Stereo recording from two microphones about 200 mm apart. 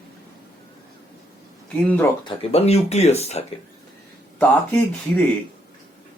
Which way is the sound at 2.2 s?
30° left (ahead or behind).